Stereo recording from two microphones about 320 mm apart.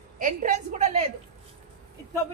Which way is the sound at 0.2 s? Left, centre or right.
Right.